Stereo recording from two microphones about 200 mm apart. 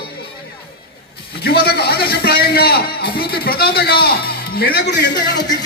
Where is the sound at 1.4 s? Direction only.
50° left (ahead or behind).